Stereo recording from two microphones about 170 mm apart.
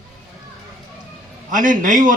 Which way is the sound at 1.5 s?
50° right (ahead or behind).